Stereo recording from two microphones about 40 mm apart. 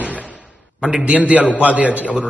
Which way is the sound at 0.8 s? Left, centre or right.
Right.